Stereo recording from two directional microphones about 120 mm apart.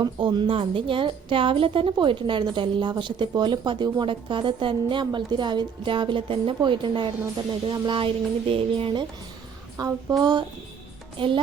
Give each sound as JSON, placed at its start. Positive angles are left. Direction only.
{"t": 0.0, "sound": "a woman's voice", "side_deg": -40}
{"t": 9.7, "sound": "a woman's voice", "side_deg": -30}